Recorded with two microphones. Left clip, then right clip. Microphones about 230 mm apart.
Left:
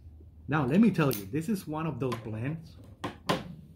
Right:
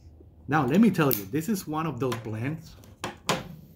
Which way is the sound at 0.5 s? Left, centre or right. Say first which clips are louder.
Right 4 dB; centre.